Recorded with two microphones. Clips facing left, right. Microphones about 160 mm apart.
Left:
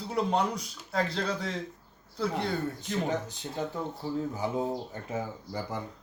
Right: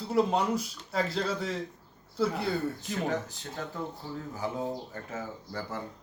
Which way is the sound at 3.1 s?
20° left (ahead or behind).